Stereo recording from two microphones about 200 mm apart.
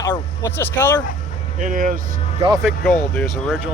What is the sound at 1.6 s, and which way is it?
Speech, 40° right (ahead or behind).